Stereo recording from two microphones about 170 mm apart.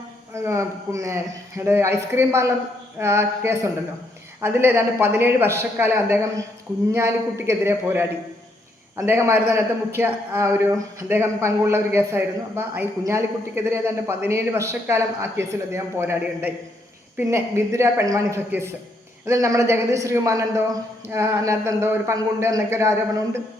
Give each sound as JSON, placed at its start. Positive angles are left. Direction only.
{"t": 0.3, "sound": "a man's voice", "side_deg": -15}